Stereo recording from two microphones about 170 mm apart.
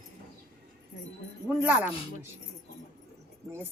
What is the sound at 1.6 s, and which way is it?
Speech, 15° right (ahead or behind).